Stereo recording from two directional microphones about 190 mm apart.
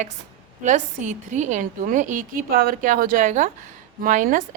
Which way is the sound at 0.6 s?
40° right (ahead or behind).